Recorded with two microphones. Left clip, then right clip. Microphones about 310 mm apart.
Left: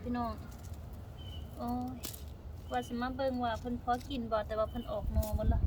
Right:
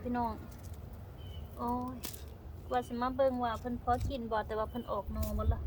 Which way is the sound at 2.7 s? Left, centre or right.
Centre.